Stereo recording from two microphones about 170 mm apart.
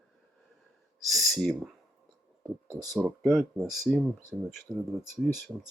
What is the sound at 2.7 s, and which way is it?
Speech, 20° right (ahead or behind).